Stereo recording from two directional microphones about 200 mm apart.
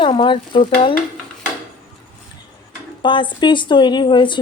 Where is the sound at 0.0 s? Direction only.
25° left (ahead or behind).